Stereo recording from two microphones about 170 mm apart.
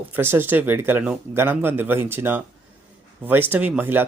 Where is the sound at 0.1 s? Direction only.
15° right (ahead or behind).